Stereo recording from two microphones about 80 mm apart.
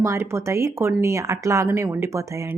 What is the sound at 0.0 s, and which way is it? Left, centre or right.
Speech, right.